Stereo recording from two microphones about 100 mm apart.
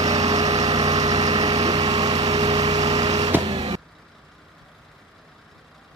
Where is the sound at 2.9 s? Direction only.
40° right (ahead or behind).